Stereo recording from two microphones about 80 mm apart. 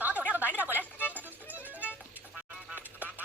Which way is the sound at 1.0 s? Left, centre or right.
Right.